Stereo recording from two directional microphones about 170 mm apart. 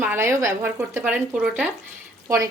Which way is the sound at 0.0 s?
10° right (ahead or behind).